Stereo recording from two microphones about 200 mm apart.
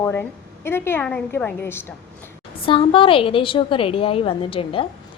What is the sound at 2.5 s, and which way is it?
A woman's voice, 25° left (ahead or behind).